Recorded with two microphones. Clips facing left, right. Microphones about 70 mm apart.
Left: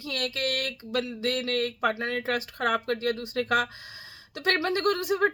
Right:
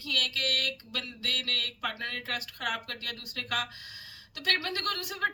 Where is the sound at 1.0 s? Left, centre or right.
Left.